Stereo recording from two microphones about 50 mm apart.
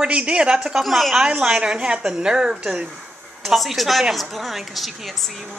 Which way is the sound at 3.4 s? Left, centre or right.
Centre.